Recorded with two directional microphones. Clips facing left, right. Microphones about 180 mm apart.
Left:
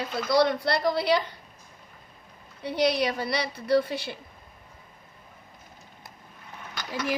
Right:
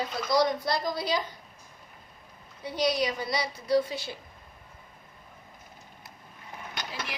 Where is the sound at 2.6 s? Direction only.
60° left (ahead or behind).